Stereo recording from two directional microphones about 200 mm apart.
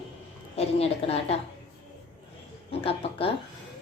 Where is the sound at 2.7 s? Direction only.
30° left (ahead or behind).